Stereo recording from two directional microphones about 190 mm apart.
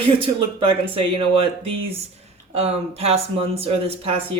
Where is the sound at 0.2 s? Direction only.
30° right (ahead or behind).